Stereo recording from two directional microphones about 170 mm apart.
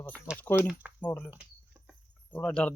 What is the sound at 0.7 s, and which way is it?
Speech, 10° right (ahead or behind).